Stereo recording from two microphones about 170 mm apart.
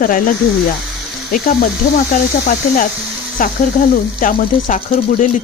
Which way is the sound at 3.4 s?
55° left (ahead or behind).